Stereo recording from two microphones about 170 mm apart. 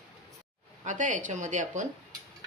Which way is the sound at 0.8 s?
45° right (ahead or behind).